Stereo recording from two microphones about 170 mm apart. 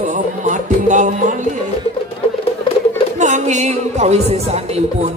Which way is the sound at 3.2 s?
45° right (ahead or behind).